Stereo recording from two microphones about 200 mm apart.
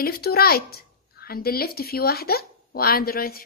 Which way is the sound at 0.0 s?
50° left (ahead or behind).